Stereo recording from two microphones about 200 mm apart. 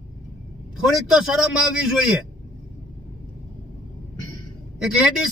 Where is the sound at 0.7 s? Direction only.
Centre (ahead or behind).